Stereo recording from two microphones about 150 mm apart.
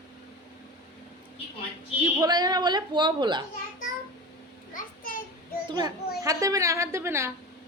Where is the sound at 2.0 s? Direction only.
25° right (ahead or behind).